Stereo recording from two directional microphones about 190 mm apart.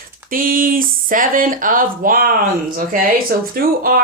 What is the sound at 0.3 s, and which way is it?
A woman's voice, 50° right (ahead or behind).